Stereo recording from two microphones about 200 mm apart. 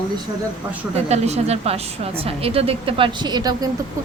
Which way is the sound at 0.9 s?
35° right (ahead or behind).